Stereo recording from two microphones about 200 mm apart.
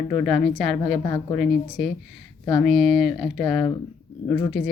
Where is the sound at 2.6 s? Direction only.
Centre (ahead or behind).